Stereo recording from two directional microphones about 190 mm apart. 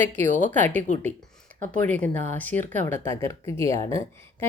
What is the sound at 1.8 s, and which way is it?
Speech, 10° left (ahead or behind).